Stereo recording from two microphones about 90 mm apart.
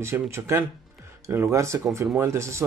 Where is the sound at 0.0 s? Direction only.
30° right (ahead or behind).